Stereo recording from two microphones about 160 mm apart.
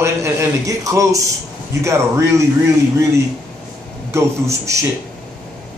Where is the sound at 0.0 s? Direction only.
20° right (ahead or behind).